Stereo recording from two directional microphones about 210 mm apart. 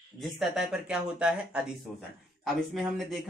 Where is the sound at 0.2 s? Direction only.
Centre (ahead or behind).